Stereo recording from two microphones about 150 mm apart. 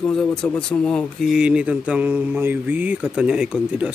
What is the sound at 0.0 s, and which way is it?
Speech, 5° left (ahead or behind).